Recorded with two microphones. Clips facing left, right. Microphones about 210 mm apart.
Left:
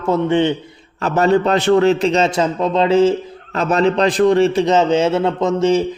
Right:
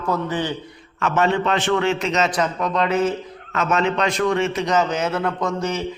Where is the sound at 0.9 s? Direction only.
35° left (ahead or behind).